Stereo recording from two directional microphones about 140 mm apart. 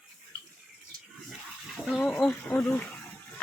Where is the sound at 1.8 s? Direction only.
5° left (ahead or behind).